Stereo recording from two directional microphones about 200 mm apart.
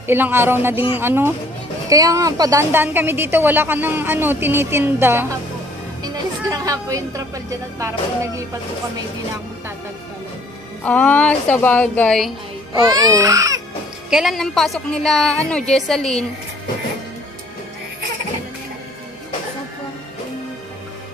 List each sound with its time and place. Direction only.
0.0 s a woman's voice: 10° right (ahead or behind)
6.5 s a woman's voice: 15° right (ahead or behind)
10.8 s a woman's voice: 5° left (ahead or behind)
12.8 s a woman's voice: 20° right (ahead or behind)
14.1 s a woman's voice: centre (ahead or behind)